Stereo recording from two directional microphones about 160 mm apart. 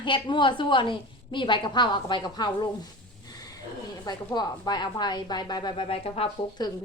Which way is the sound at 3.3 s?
20° left (ahead or behind).